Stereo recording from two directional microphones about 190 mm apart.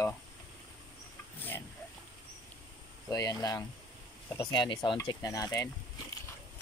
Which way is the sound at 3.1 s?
20° left (ahead or behind).